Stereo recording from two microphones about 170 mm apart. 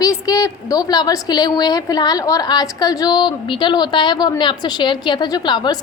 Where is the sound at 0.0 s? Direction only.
20° left (ahead or behind).